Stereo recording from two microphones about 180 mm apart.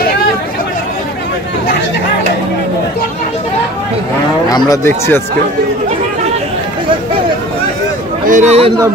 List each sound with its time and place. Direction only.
4.5 s speech: 20° left (ahead or behind)
8.3 s speech: 40° right (ahead or behind)